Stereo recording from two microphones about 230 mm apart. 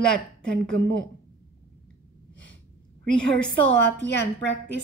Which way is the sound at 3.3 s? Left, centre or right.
Centre.